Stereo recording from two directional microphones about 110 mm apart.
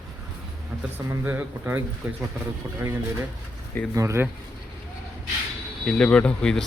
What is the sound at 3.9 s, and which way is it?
Speech, 25° right (ahead or behind).